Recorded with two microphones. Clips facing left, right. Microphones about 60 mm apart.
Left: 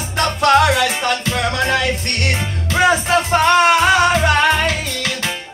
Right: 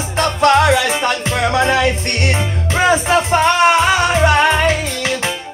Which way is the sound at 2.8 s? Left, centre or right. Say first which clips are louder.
Right 1 dB; centre.